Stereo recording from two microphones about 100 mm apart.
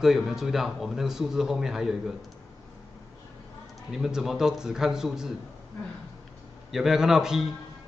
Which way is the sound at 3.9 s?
5° right (ahead or behind).